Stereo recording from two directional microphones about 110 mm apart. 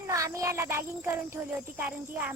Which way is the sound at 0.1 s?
30° right (ahead or behind).